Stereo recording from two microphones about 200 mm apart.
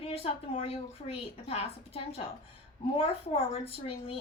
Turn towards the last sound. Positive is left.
turn(degrees=30)  # may be behind; listen again after turning